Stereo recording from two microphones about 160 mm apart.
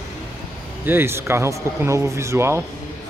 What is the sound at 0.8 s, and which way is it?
Speech, 15° right (ahead or behind).